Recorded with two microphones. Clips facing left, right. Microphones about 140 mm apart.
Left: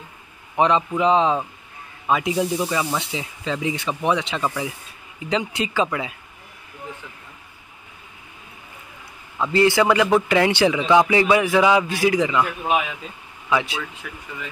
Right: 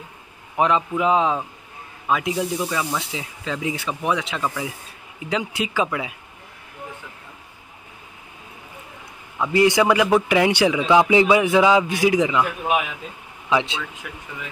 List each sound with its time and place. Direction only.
0.6 s a man's voice: 5° right (ahead or behind)
9.4 s a man's voice: 15° right (ahead or behind)
11.1 s a man's voice: 15° right (ahead or behind)
12.3 s speech: 5° right (ahead or behind)
13.5 s speech: 20° right (ahead or behind)